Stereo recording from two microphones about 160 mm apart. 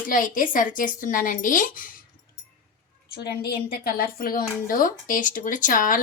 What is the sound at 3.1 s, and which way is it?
A woman's voice, 75° left (ahead or behind).